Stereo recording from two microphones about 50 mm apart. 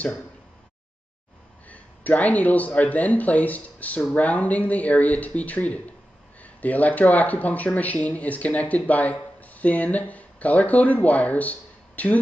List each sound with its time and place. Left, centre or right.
1.7 s speech: left